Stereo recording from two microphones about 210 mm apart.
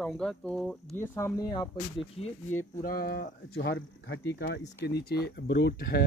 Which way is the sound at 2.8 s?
45° left (ahead or behind).